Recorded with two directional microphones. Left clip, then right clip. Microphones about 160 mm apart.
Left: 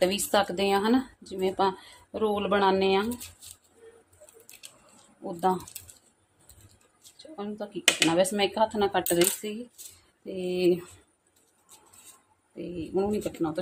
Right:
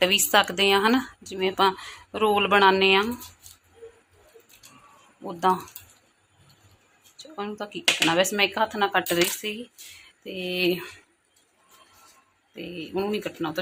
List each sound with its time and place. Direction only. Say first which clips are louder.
0.0 s speech: right 5 dB; 10° left (ahead or behind)
5.5 s speech: right 7 dB; 10° left (ahead or behind)
7.2 s speech: right 4 dB; 10° left (ahead or behind)
12.5 s speech: even; 10° left (ahead or behind)